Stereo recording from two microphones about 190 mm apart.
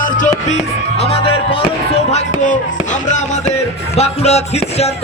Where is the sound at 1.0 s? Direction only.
30° left (ahead or behind).